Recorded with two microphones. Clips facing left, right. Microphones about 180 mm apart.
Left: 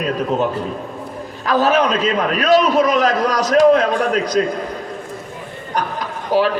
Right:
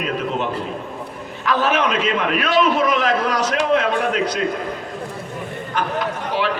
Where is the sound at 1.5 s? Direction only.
40° left (ahead or behind).